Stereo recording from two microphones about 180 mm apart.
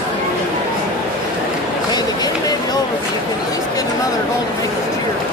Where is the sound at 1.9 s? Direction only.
20° left (ahead or behind).